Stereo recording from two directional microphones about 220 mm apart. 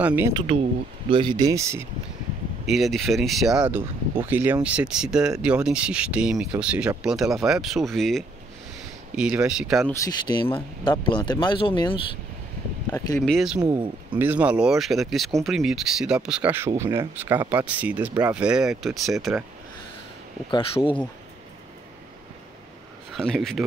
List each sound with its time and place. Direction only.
0.0 s speech: 10° right (ahead or behind)
0.3 s speech: 20° right (ahead or behind)
2.6 s speech: centre (ahead or behind)
10.0 s speech: 20° left (ahead or behind)
12.9 s speech: 5° left (ahead or behind)
13.6 s speech: 15° right (ahead or behind); by 19.4 s centre (ahead or behind)
20.5 s speech: 20° left (ahead or behind)
23.1 s speech: centre (ahead or behind)